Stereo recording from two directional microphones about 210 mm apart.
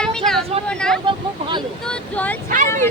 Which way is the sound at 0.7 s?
5° left (ahead or behind).